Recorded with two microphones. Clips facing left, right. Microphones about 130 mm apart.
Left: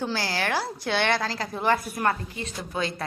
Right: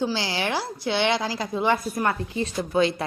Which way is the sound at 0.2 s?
20° right (ahead or behind).